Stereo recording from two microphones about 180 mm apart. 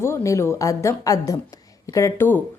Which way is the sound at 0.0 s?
15° left (ahead or behind).